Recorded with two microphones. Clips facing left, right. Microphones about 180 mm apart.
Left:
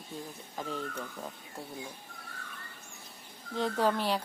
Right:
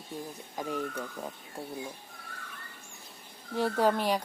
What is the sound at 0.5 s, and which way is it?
Speech, 15° right (ahead or behind).